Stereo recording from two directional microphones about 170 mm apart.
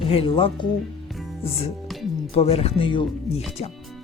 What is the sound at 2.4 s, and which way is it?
Speech, 35° left (ahead or behind).